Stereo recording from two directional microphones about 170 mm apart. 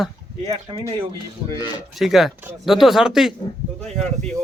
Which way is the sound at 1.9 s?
Centre (ahead or behind).